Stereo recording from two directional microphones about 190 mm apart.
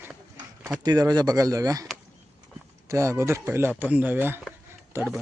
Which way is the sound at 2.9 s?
15° right (ahead or behind).